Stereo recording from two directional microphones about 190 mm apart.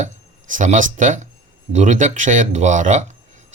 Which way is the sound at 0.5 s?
40° right (ahead or behind).